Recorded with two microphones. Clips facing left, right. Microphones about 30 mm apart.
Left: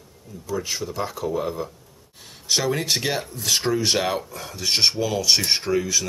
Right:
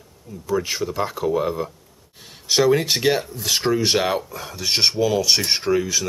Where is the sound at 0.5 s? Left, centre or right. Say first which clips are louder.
Right 5 dB; centre.